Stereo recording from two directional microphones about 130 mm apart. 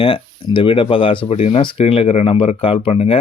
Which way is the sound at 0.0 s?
45° left (ahead or behind).